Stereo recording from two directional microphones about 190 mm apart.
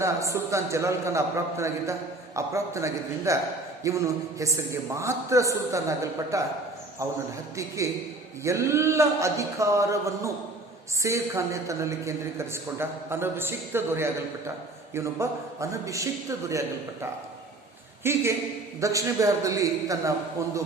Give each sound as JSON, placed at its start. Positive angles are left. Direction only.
{"t": 0.0, "sound": "speech", "side_deg": -15}
{"t": 8.4, "sound": "speech", "side_deg": -15}